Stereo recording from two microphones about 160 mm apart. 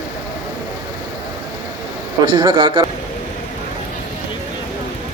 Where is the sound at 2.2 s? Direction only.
30° right (ahead or behind).